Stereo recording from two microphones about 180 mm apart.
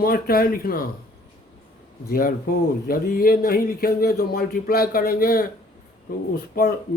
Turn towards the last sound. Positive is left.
turn(degrees=55)  # may be behind; listen again after turning